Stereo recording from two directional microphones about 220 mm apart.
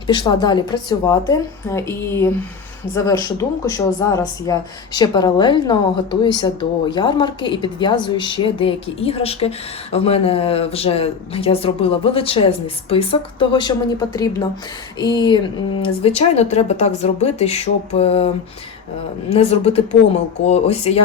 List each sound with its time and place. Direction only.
0.1 s a woman's voice: 20° left (ahead or behind)
19.3 s speech: 25° left (ahead or behind)